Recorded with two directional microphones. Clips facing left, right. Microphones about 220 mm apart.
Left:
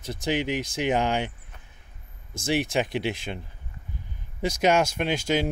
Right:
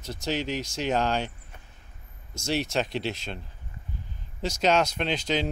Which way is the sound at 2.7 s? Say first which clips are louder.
Left 2 dB; 15° left (ahead or behind).